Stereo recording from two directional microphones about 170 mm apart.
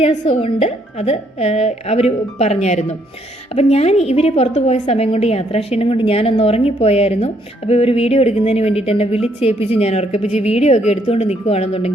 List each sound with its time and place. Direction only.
0.0 s speech: 35° left (ahead or behind)